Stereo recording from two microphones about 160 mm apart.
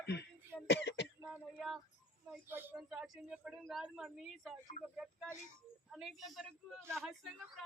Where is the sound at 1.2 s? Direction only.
15° right (ahead or behind).